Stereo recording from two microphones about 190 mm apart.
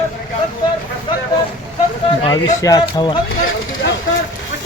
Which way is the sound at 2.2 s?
20° left (ahead or behind).